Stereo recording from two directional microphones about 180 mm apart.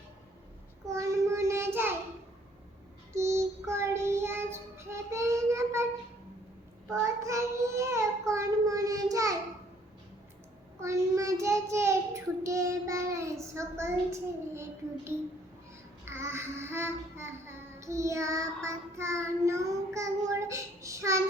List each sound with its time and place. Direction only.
0.9 s child singing: 15° right (ahead or behind)
3.1 s child singing: 15° right (ahead or behind)
7.0 s child singing: 15° right (ahead or behind)
10.8 s child singing: 15° right (ahead or behind)
13.5 s a child's voice: 15° right (ahead or behind)
16.0 s child singing: 15° right (ahead or behind)